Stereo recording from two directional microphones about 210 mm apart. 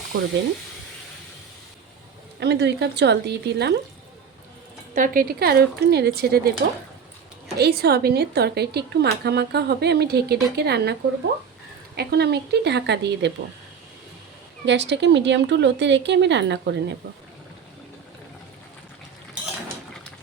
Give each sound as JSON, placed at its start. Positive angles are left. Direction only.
{"t": 0.1, "sound": "a woman's voice", "side_deg": -55}
{"t": 2.4, "sound": "a woman's voice", "side_deg": -50}
{"t": 4.9, "sound": "a woman's voice", "side_deg": -40}
{"t": 7.6, "sound": "a woman's voice", "side_deg": -50}
{"t": 11.9, "sound": "a woman's voice", "side_deg": -50}
{"t": 14.6, "sound": "speech", "side_deg": -55}